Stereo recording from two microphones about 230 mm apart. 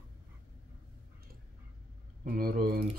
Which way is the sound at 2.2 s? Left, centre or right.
Right.